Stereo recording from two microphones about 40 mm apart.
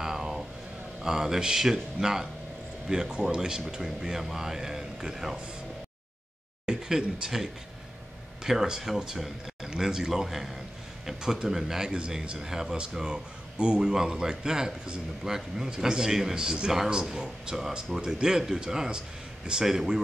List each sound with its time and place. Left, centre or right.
0.0 s vehicle: centre
1.0 s speech: centre
6.6 s speech: centre
8.5 s speech: centre